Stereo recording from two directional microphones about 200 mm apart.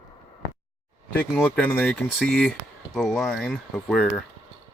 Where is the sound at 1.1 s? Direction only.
10° left (ahead or behind).